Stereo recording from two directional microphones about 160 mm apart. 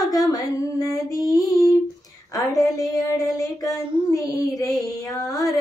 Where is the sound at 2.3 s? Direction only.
20° left (ahead or behind).